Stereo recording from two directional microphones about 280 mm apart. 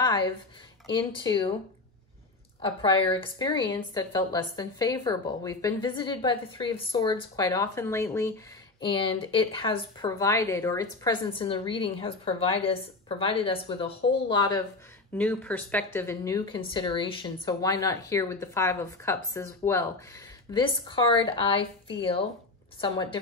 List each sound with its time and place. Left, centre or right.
0.0 s a sound: centre
0.9 s a woman's voice: centre
2.6 s a woman's voice: centre